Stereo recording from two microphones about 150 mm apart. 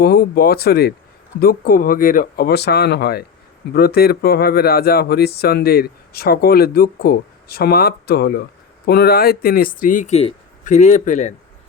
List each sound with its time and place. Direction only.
0.0 s speech: 90° left; by 11.3 s 55° left (ahead or behind)